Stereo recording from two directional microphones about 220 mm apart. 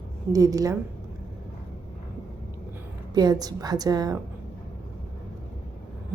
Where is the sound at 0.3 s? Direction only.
15° right (ahead or behind).